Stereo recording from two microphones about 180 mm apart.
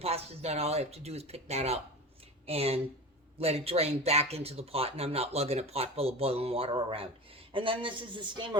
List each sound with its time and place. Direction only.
0.0 s a man's voice: 35° right (ahead or behind)